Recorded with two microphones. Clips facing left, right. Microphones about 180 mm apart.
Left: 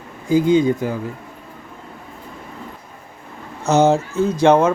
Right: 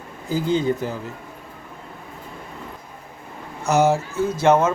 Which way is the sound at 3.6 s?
20° left (ahead or behind).